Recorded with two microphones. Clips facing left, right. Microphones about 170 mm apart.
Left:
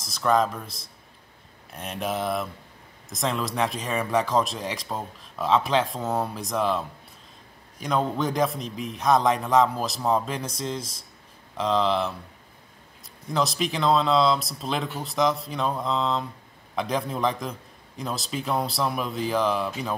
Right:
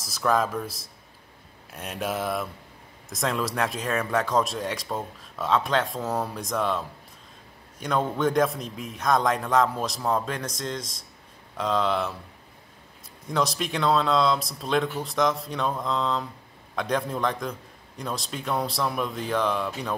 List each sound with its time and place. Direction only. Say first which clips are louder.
0.1 s speech: left 2 dB; 5° right (ahead or behind)
1.7 s speech: left 1 dB; centre (ahead or behind)
7.8 s speech: even; centre (ahead or behind)
13.3 s speech: left 1 dB; centre (ahead or behind)